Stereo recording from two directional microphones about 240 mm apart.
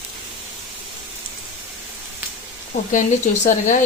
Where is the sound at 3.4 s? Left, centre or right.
Left.